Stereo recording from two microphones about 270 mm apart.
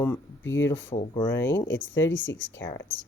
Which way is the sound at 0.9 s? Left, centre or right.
Left.